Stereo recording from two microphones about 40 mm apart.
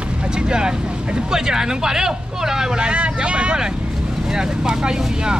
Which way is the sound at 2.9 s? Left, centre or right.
Right.